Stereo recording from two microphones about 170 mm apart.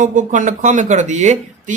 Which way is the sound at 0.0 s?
50° right (ahead or behind).